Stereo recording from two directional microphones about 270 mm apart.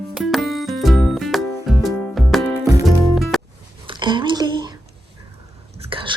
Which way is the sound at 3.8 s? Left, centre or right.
Centre.